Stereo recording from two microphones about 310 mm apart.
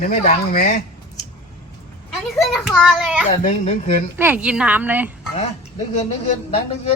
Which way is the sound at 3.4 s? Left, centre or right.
Left.